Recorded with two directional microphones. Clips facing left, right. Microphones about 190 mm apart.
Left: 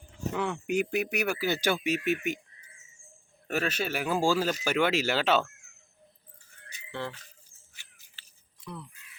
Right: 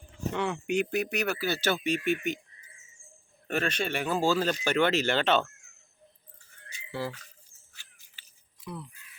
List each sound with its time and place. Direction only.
0.3 s speech: centre (ahead or behind)
3.4 s speech: 5° left (ahead or behind)
8.6 s speech: 5° right (ahead or behind)